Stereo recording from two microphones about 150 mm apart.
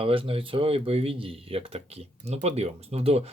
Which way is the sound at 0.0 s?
35° right (ahead or behind).